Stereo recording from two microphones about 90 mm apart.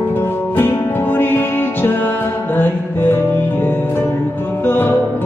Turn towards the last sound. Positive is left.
turn(degrees=25)  # may be behind; listen again after turning